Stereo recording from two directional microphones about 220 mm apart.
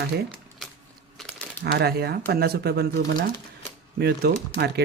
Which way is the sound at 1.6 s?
45° right (ahead or behind).